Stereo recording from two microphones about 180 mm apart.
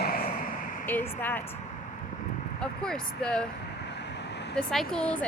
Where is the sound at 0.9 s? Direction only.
10° left (ahead or behind).